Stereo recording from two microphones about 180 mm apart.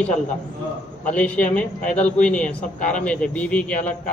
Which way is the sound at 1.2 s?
5° left (ahead or behind).